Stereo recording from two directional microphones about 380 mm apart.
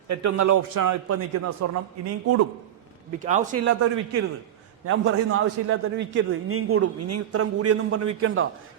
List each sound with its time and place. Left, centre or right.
0.1 s a man's voice: right
1.0 s a man's voice: right
3.2 s a man's voice: centre